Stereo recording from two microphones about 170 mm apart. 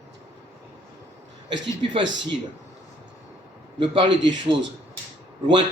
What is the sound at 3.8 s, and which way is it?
Speech, 30° right (ahead or behind).